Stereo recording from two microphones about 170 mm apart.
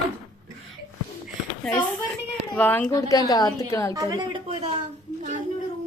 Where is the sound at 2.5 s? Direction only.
10° left (ahead or behind).